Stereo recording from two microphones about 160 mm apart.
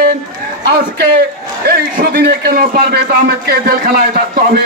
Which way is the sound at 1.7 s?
65° right (ahead or behind).